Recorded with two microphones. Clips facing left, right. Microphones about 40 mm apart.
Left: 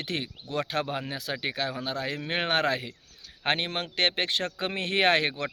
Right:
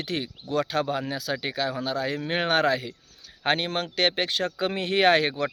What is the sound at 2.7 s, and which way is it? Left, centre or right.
Speech, left.